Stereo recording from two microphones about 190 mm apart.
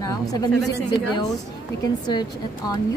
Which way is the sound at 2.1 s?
20° left (ahead or behind).